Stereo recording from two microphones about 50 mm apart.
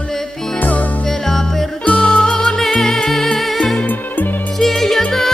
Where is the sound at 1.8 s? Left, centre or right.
Left; by 3.4 s centre.